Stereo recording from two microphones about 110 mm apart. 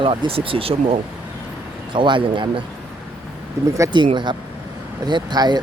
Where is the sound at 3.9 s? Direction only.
45° right (ahead or behind).